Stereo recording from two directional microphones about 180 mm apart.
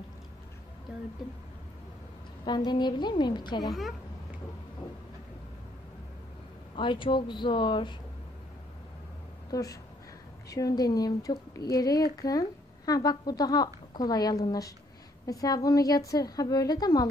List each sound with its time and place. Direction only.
2.4 s a woman's voice: 25° left (ahead or behind)
3.6 s a woman's voice: centre (ahead or behind)
6.7 s a woman's voice: 30° left (ahead or behind)
9.5 s a woman's voice: 20° left (ahead or behind)